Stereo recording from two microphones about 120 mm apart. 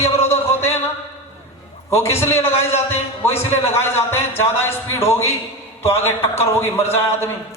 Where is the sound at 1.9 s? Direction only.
20° left (ahead or behind).